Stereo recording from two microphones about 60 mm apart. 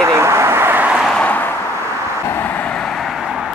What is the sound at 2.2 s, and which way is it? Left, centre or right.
Vehicle, left.